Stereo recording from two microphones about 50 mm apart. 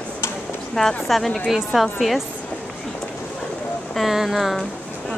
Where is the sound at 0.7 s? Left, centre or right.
Centre.